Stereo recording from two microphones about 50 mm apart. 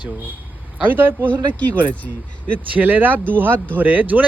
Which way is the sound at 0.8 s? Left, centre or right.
Right.